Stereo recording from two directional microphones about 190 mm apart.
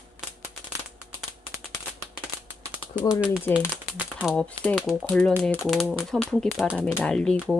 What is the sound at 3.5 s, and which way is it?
Speech, 5° left (ahead or behind).